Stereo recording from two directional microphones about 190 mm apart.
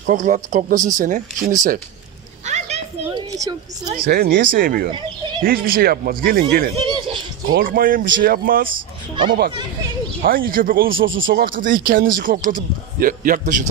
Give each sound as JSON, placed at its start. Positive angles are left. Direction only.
{"t": 0.0, "sound": "speech", "side_deg": -40}
{"t": 2.4, "sound": "a sound", "side_deg": -35}
{"t": 3.2, "sound": "speech", "side_deg": -20}
{"t": 4.0, "sound": "speech", "side_deg": -55}
{"t": 6.9, "sound": "a sound", "side_deg": -25}
{"t": 7.5, "sound": "speech", "side_deg": -50}
{"t": 8.6, "sound": "speech", "side_deg": -25}
{"t": 10.2, "sound": "speech", "side_deg": -50}
{"t": 10.9, "sound": "speech", "side_deg": -90}
{"t": 11.3, "sound": "speech", "side_deg": -45}